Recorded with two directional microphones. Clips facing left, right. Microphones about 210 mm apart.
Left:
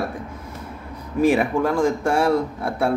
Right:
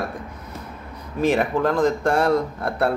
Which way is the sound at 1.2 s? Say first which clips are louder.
Left 2 dB; 10° left (ahead or behind).